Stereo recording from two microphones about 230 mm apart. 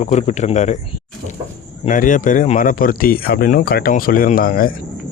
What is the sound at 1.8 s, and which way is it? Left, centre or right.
Speech, left.